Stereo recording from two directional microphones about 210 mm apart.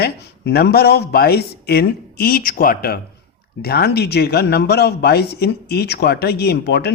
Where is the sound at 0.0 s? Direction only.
50° left (ahead or behind).